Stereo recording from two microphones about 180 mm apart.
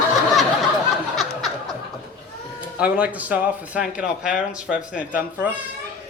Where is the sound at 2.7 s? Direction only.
5° right (ahead or behind).